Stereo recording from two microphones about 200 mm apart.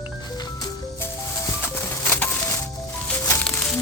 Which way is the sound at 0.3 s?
20° left (ahead or behind).